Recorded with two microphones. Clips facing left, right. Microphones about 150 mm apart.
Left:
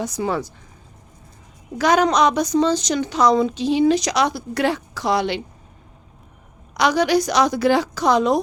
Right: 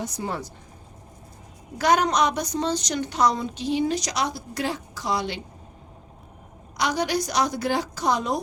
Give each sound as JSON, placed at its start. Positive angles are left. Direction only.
{"t": 0.0, "sound": "a woman's voice", "side_deg": 90}
{"t": 1.8, "sound": "a woman's voice", "side_deg": 90}
{"t": 6.7, "sound": "a woman's voice", "side_deg": 90}